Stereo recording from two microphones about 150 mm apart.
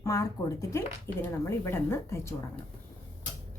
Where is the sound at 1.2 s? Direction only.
15° left (ahead or behind).